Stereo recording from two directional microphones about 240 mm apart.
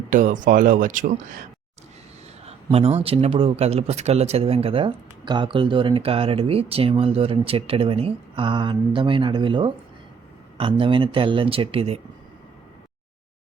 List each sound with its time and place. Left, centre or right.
0.1 s speech: right
2.5 s speech: right